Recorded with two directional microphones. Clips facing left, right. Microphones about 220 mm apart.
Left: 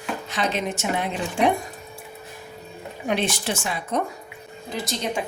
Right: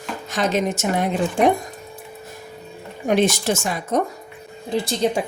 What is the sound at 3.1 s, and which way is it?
Speech, 45° right (ahead or behind).